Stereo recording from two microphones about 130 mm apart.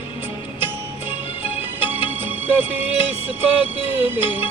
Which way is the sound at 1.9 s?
15° right (ahead or behind).